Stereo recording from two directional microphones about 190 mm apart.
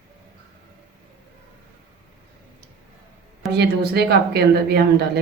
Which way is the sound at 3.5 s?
55° right (ahead or behind).